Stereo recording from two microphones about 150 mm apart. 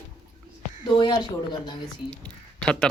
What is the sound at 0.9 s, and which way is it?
Speech, 30° left (ahead or behind).